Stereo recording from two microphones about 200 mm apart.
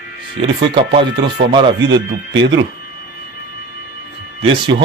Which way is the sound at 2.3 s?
65° right (ahead or behind).